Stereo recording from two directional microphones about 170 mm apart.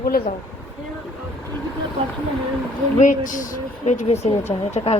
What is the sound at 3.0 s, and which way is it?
A woman's voice, 50° left (ahead or behind).